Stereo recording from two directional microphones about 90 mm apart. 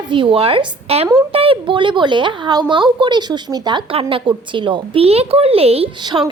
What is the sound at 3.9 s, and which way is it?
A woman's voice, 85° right.